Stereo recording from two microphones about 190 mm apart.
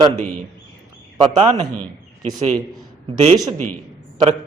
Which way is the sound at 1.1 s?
30° right (ahead or behind).